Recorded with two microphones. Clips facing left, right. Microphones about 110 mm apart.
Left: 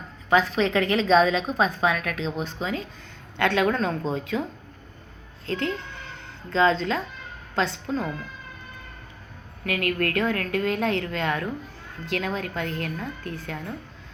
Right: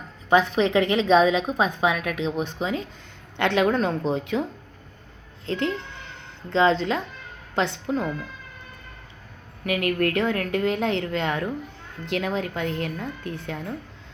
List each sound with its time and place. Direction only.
0.3 s a woman's voice: 20° right (ahead or behind)
5.5 s a woman's voice: 20° right (ahead or behind)
9.6 s a woman's voice: 20° right (ahead or behind)